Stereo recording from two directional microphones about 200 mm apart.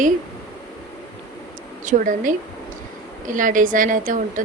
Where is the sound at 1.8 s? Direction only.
40° right (ahead or behind).